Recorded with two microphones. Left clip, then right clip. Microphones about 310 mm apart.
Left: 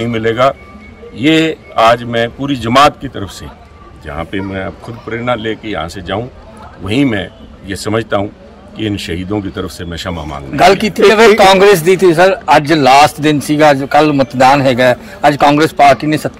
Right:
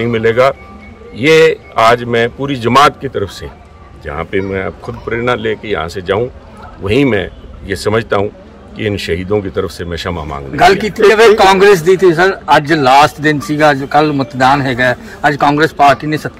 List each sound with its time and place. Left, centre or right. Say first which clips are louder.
0.0 s a man's voice: right 1 dB; centre
10.5 s a man's voice: left 1 dB; left